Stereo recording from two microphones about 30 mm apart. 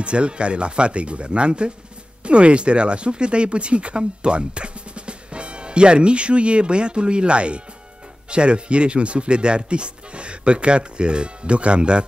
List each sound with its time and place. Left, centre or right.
0.0 s speech: right